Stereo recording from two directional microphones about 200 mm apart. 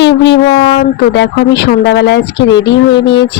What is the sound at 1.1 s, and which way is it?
Speech, 60° left (ahead or behind).